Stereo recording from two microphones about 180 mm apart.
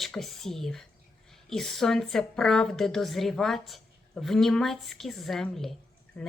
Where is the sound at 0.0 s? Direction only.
Centre (ahead or behind).